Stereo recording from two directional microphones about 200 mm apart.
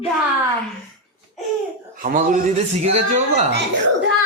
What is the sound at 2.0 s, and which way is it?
Speech, 40° right (ahead or behind).